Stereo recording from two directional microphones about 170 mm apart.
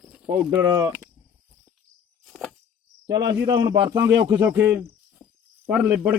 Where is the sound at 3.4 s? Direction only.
25° right (ahead or behind).